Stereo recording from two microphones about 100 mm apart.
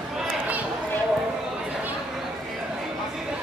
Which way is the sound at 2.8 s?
5° right (ahead or behind).